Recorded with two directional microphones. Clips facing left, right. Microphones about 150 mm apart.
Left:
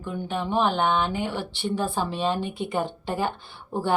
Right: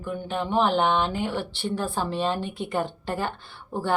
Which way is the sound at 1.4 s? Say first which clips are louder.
Left 1 dB; 15° left (ahead or behind).